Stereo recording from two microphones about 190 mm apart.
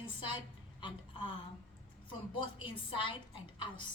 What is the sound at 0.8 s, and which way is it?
Speech, 25° left (ahead or behind).